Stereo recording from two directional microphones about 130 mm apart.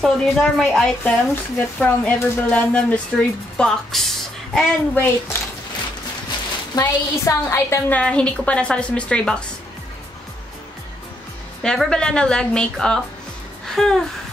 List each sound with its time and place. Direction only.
0.0 s speech: 5° left (ahead or behind)
4.6 s speech: 15° left (ahead or behind)
6.8 s a woman's voice: 20° left (ahead or behind)
8.0 s speech: 10° left (ahead or behind)
11.6 s a woman's voice: 5° left (ahead or behind)
13.7 s music: 5° left (ahead or behind)